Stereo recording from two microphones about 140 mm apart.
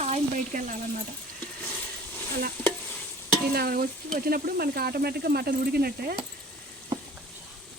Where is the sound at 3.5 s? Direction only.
90° right.